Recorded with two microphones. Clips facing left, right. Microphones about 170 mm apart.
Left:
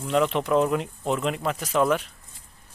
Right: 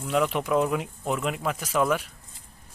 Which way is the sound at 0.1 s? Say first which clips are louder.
Left 2 dB; 10° right (ahead or behind).